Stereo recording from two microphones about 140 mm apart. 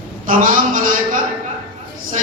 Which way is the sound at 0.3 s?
70° right (ahead or behind).